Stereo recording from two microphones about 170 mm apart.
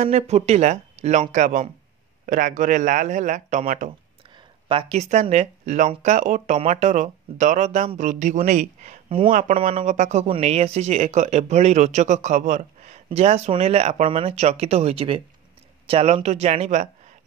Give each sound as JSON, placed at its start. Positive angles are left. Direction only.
{"t": 0.0, "sound": "speech", "side_deg": -40}
{"t": 4.6, "sound": "speech", "side_deg": -35}
{"t": 9.6, "sound": "speech", "side_deg": -35}